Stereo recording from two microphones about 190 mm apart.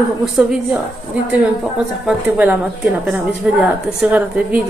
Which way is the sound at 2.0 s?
5° right (ahead or behind).